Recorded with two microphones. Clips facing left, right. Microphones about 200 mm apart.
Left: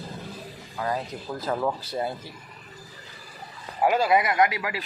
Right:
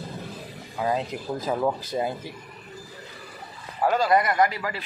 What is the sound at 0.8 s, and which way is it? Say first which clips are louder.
Speech: right 3 dB; 20° right (ahead or behind).